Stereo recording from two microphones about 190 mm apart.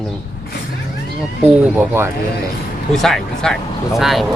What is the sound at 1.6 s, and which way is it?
Speech, 10° right (ahead or behind).